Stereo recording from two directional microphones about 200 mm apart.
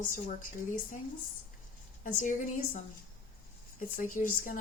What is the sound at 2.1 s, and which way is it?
A woman's voice, 40° left (ahead or behind).